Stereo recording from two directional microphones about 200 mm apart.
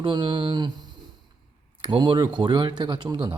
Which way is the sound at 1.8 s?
25° right (ahead or behind).